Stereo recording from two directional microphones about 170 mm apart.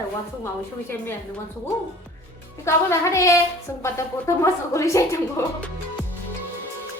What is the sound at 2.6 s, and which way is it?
Speech, 15° left (ahead or behind).